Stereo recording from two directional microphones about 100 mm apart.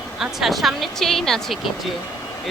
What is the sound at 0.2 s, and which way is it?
Speech, centre (ahead or behind).